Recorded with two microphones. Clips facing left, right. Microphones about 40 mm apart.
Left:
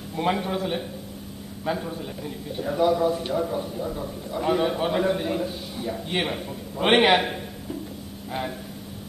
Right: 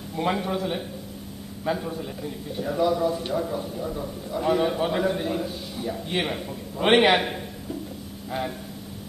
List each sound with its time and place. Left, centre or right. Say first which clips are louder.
0.1 s a man's voice: left 1 dB; centre